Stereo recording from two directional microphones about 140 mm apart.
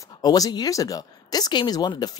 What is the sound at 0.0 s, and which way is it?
Speech, 25° left (ahead or behind).